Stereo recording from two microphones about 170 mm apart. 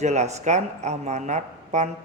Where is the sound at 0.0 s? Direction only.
40° right (ahead or behind).